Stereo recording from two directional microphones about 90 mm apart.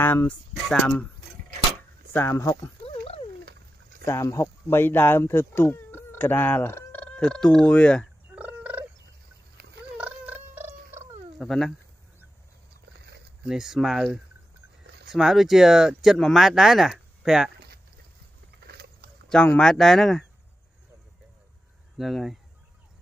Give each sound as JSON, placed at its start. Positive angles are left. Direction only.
{"t": 0.0, "sound": "speech", "side_deg": 20}
{"t": 2.1, "sound": "speech", "side_deg": 25}
{"t": 4.0, "sound": "speech", "side_deg": 30}
{"t": 8.4, "sound": "turkey", "side_deg": -15}
{"t": 9.9, "sound": "cat", "side_deg": -15}
{"t": 11.3, "sound": "speech", "side_deg": 5}
{"t": 13.5, "sound": "speech", "side_deg": -5}
{"t": 19.2, "sound": "speech", "side_deg": 10}
{"t": 21.9, "sound": "speech", "side_deg": 0}